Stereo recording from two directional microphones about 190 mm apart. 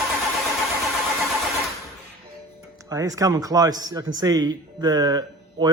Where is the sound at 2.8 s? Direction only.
15° right (ahead or behind).